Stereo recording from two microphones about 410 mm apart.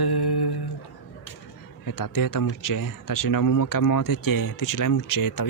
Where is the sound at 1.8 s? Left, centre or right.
Left.